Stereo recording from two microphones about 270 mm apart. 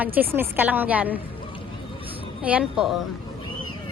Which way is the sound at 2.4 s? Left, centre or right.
Centre.